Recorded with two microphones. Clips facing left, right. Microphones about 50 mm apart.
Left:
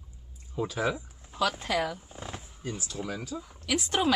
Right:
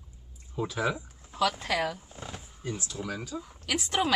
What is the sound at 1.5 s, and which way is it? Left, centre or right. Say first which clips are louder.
Speech: even; centre.